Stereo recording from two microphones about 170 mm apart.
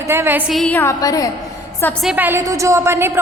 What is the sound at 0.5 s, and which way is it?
Speech, 5° left (ahead or behind).